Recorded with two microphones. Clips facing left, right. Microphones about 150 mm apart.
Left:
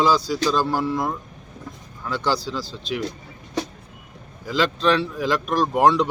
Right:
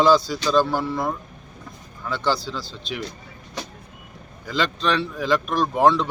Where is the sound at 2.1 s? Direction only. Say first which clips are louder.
Even; 10° left (ahead or behind).